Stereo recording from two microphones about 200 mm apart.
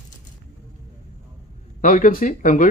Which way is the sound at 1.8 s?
40° left (ahead or behind).